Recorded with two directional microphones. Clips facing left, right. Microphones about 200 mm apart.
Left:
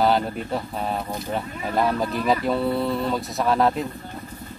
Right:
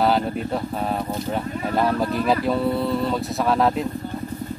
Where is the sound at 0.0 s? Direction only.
Centre (ahead or behind).